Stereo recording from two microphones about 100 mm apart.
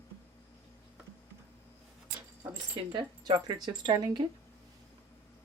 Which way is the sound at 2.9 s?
50° right (ahead or behind).